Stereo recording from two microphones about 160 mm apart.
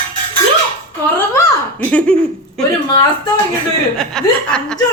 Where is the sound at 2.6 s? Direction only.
5° left (ahead or behind).